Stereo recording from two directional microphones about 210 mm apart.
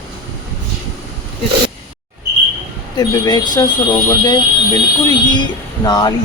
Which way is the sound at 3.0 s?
20° left (ahead or behind).